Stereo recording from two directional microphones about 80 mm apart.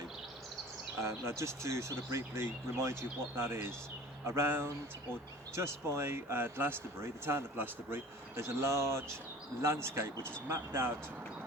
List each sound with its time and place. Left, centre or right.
1.0 s speech: right